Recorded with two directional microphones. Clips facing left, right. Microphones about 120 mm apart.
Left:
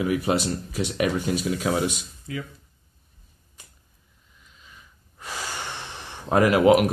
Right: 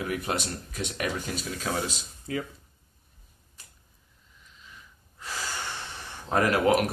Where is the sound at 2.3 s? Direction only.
35° right (ahead or behind).